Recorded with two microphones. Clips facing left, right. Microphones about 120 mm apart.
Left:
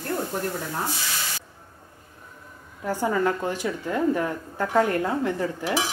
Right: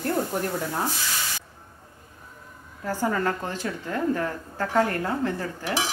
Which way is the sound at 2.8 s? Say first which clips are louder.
Left 2 dB; 15° left (ahead or behind).